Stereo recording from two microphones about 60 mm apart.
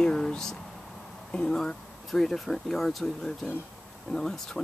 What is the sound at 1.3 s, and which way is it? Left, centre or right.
Speech, centre.